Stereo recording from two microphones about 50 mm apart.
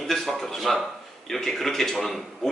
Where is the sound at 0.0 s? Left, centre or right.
Centre.